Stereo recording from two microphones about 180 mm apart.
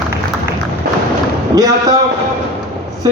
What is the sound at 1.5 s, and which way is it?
Speech, 20° right (ahead or behind).